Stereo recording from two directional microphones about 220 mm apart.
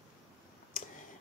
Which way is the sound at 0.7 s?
40° left (ahead or behind).